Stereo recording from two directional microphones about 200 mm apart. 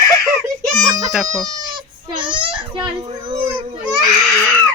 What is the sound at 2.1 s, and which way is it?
Speech, 25° right (ahead or behind).